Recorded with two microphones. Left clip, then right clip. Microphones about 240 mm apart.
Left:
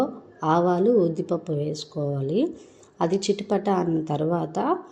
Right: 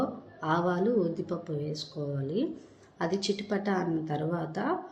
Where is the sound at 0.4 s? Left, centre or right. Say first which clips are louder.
Left 8 dB; left.